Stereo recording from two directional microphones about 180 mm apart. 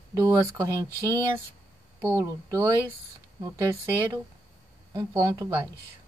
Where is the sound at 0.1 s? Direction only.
15° right (ahead or behind).